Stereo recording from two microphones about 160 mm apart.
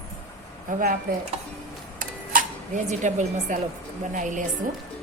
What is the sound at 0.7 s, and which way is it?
Speech, 60° right (ahead or behind).